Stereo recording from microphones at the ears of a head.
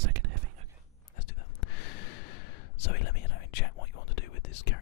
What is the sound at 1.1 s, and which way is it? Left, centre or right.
Gasp, left.